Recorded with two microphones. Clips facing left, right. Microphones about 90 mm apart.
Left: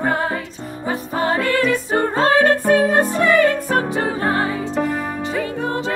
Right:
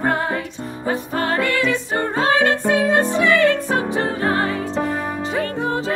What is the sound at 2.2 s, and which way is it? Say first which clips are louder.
Music: left 2 dB; 15° right (ahead or behind).